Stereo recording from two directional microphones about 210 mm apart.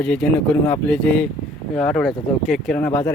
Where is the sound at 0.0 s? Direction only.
5° left (ahead or behind).